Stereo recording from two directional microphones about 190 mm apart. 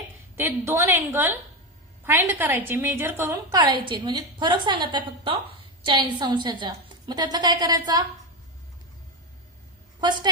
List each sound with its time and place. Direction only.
0.3 s a woman's voice: 15° right (ahead or behind)